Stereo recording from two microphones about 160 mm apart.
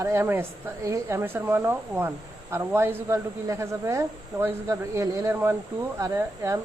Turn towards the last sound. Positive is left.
turn(degrees=-20)  # may be behind; listen again after turning